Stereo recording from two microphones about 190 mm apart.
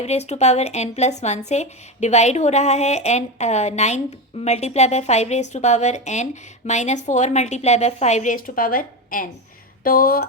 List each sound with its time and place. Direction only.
0.0 s speech: 35° left (ahead or behind); by 10.2 s 50° left (ahead or behind)